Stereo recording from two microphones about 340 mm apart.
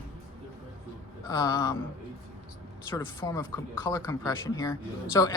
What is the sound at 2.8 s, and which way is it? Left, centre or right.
Speech, centre.